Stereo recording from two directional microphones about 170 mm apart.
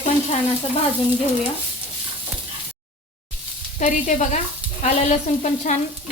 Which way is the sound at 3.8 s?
45° left (ahead or behind).